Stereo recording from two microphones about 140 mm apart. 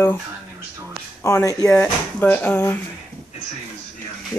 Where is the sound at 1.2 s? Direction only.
20° left (ahead or behind).